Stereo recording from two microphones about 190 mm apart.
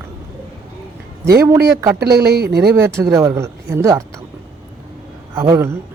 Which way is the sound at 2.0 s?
55° right (ahead or behind).